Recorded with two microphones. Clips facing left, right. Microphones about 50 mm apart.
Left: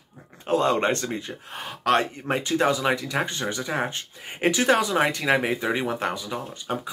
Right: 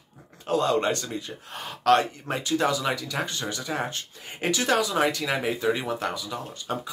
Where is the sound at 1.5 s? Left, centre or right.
Centre.